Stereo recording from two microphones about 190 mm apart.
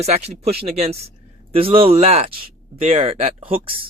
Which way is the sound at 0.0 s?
35° right (ahead or behind).